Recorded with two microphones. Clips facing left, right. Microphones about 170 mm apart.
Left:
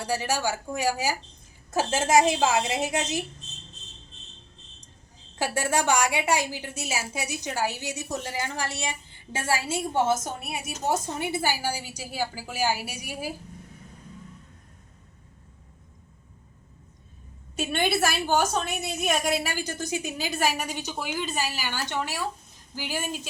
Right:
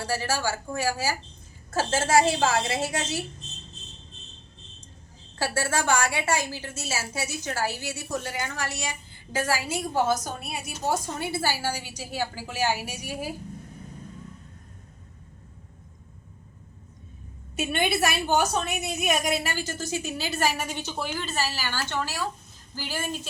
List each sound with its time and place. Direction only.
0.0 s a woman's voice: 15° left (ahead or behind)
5.4 s a woman's voice: 15° left (ahead or behind)
17.6 s a woman's voice: 5° right (ahead or behind)
19.4 s a woman's voice: 10° left (ahead or behind)